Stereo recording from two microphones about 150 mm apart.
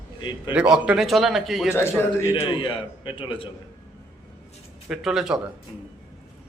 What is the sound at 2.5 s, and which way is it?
A man's voice, 35° left (ahead or behind).